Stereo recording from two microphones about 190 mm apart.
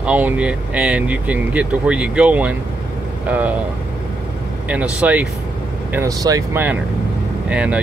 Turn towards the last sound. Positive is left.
turn(degrees=-5)  # may be behind; listen again after turning